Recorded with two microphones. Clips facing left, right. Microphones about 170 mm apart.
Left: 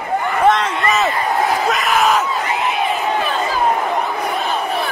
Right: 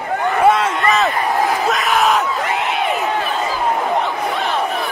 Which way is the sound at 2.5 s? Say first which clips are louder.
Even; 65° right (ahead or behind).